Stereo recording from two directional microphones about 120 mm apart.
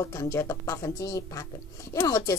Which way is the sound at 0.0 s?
25° left (ahead or behind).